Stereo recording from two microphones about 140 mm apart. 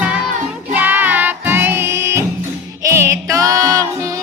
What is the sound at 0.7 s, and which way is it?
Music, 10° right (ahead or behind).